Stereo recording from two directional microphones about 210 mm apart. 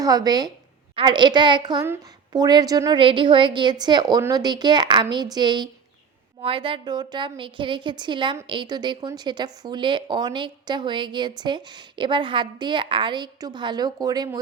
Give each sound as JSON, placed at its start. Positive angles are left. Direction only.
{"t": 0.0, "sound": "a woman's voice", "side_deg": -20}